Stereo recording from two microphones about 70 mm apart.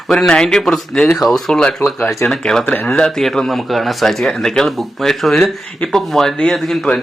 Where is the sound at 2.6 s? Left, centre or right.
Left.